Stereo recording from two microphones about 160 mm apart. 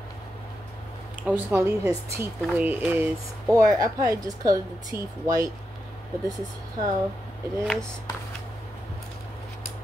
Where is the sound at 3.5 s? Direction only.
20° right (ahead or behind).